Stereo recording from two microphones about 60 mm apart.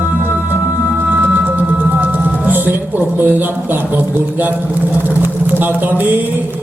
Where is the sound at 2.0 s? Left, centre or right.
Right.